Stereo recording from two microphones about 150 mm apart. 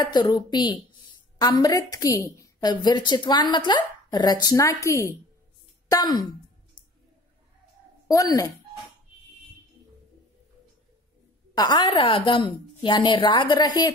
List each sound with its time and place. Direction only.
0.0 s a woman's voice: 25° left (ahead or behind)
5.9 s sigh: 30° left (ahead or behind)
8.1 s a woman's voice: 20° left (ahead or behind)
11.5 s a woman's voice: 30° left (ahead or behind)